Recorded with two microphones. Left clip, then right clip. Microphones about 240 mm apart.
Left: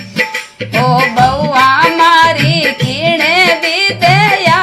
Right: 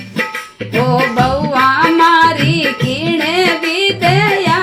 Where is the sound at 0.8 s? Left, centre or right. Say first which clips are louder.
Left 3 dB; left.